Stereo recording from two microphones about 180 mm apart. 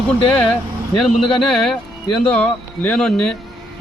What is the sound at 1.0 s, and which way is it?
Speech, centre (ahead or behind).